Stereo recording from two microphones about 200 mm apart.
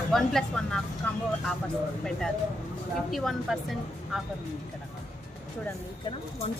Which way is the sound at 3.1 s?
Centre (ahead or behind).